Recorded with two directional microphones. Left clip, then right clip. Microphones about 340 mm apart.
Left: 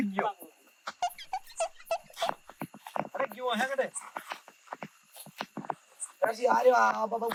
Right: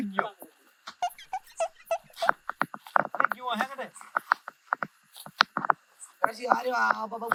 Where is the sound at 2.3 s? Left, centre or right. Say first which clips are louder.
Right 10 dB; left.